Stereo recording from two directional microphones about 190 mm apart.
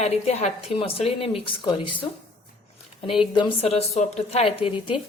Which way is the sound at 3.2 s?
25° left (ahead or behind).